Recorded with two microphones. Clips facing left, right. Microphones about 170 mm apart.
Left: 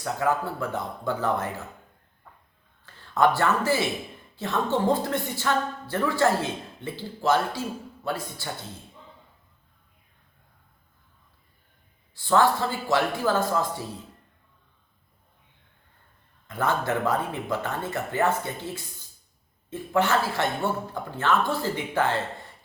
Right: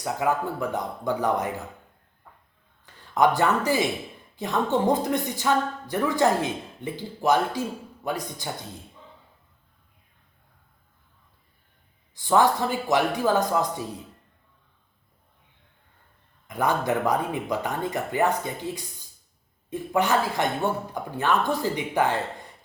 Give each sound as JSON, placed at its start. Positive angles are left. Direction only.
{"t": 0.0, "sound": "a woman's voice", "side_deg": -15}
{"t": 2.8, "sound": "a man's voice", "side_deg": -15}
{"t": 12.1, "sound": "a woman's voice", "side_deg": -15}
{"t": 16.5, "sound": "a woman's voice", "side_deg": -15}